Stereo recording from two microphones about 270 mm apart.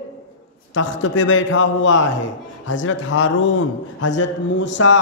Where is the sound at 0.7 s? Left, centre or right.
Left.